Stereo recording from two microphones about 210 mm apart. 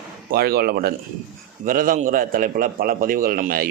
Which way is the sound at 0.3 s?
50° right (ahead or behind).